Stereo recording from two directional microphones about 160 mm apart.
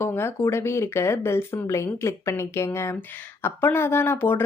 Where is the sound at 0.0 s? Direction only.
15° left (ahead or behind).